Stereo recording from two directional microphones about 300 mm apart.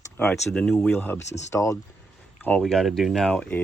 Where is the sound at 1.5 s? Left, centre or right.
Centre.